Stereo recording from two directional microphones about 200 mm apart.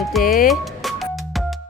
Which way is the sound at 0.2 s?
45° left (ahead or behind).